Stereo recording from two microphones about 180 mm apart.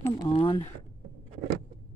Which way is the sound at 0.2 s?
30° left (ahead or behind).